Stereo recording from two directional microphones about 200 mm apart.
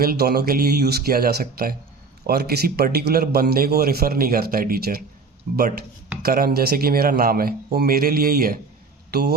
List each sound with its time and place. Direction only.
0.0 s a man's voice: 50° right (ahead or behind)